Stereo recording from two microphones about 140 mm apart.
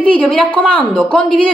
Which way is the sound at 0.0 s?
10° left (ahead or behind).